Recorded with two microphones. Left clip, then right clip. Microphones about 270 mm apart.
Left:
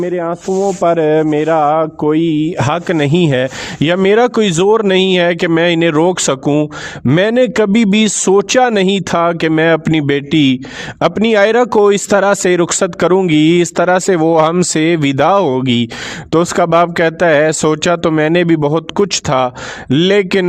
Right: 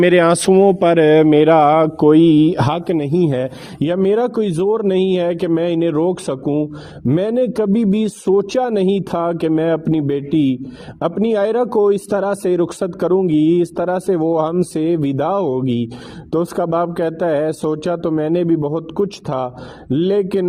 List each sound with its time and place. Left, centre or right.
0.0 s speech: right
0.8 s mantra: centre
2.6 s a man's voice: centre
2.8 s speech: left